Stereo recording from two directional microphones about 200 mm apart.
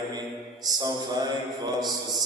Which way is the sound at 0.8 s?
20° right (ahead or behind).